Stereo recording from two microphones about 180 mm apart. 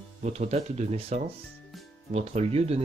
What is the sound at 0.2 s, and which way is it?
Speech, 40° right (ahead or behind).